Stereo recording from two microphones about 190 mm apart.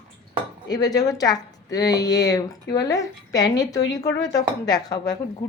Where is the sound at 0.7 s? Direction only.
20° left (ahead or behind).